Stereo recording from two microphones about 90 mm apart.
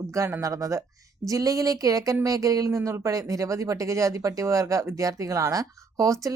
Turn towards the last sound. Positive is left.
turn(degrees=-40)  # may be behind; listen again after turning